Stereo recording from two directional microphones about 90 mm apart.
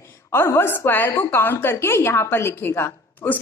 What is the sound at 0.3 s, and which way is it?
A woman's voice, 25° left (ahead or behind).